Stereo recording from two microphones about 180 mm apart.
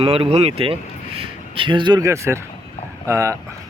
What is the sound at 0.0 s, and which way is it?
Speech, 35° right (ahead or behind).